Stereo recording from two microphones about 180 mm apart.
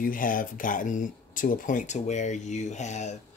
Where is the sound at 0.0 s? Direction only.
50° left (ahead or behind).